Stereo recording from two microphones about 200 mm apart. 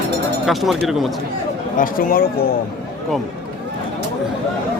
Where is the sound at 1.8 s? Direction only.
45° left (ahead or behind).